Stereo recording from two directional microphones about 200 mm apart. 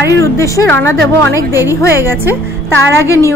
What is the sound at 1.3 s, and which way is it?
Speech, 10° right (ahead or behind).